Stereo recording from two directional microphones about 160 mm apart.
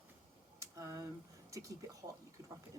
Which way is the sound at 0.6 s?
20° right (ahead or behind).